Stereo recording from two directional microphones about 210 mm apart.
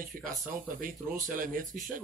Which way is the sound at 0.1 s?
40° right (ahead or behind).